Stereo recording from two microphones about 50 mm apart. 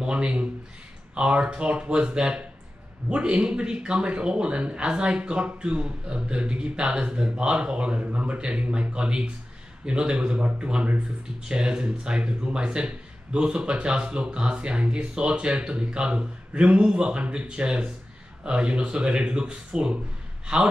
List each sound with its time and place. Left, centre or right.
0.0 s speech: right
8.6 s speech: right
8.9 s speech: right